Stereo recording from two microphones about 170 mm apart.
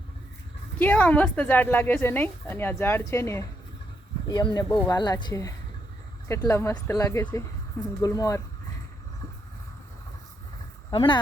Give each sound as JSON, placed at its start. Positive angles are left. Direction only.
{"t": 0.8, "sound": "a woman's voice", "side_deg": 10}
{"t": 10.9, "sound": "speech", "side_deg": 30}